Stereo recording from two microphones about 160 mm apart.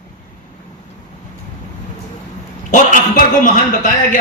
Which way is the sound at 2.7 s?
55° left (ahead or behind).